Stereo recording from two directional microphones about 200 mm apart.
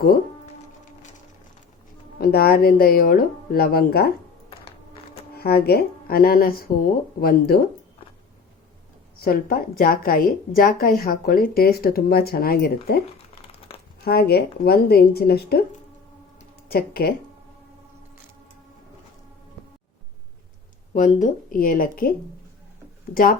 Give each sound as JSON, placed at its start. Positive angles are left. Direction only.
{"t": 2.2, "sound": "a woman's voice", "side_deg": 50}
{"t": 5.3, "sound": "a woman's voice", "side_deg": 50}
{"t": 9.2, "sound": "a woman's voice", "side_deg": 50}
{"t": 14.0, "sound": "a woman's voice", "side_deg": 50}
{"t": 16.6, "sound": "a woman's voice", "side_deg": 50}
{"t": 20.9, "sound": "a woman's voice", "side_deg": 40}